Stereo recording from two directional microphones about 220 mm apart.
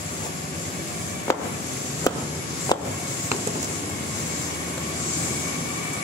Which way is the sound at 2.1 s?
15° left (ahead or behind).